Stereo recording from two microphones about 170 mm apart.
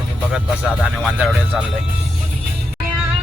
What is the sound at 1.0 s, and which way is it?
Speech, 5° right (ahead or behind).